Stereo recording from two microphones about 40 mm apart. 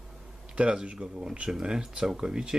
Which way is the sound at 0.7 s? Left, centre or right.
Right.